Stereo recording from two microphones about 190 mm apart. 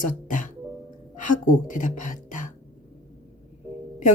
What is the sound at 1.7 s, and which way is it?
Speech, 45° left (ahead or behind).